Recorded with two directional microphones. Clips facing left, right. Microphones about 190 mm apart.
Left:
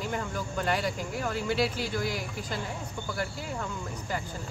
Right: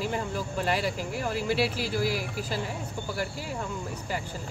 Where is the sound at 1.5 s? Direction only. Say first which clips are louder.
Right 1 dB; 5° right (ahead or behind).